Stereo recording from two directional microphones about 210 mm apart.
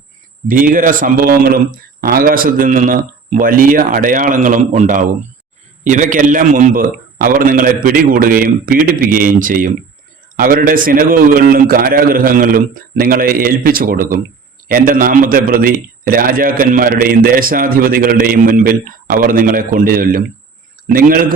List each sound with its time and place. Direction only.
0.4 s a man's voice: 40° right (ahead or behind)